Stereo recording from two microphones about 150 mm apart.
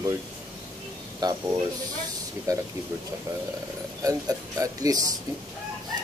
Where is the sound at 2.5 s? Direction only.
25° right (ahead or behind).